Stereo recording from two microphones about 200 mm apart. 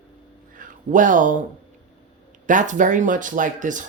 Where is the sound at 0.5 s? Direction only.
40° right (ahead or behind).